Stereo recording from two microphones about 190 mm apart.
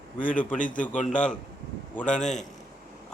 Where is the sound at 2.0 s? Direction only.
40° left (ahead or behind).